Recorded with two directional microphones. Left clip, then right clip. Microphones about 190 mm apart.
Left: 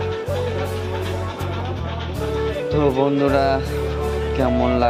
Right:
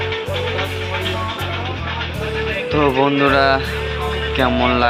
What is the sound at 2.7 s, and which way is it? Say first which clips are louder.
Speech: right 3 dB; 20° right (ahead or behind).